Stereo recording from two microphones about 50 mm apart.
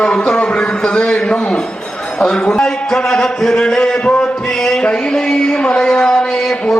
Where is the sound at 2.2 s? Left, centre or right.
Centre.